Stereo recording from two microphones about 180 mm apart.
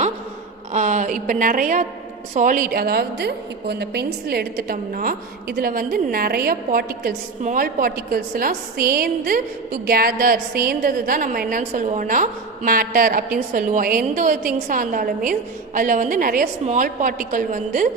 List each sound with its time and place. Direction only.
0.7 s a woman's voice: 40° right (ahead or behind)